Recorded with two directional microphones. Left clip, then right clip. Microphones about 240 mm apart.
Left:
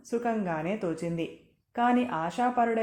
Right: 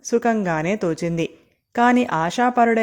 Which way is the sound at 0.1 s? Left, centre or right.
Right.